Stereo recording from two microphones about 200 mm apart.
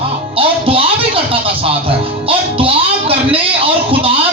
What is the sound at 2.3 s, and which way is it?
Music, 25° right (ahead or behind).